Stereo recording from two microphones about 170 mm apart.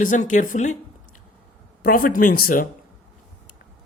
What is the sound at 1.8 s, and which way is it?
Speech, 55° left (ahead or behind).